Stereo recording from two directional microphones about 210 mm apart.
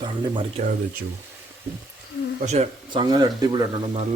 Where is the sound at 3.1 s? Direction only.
15° right (ahead or behind).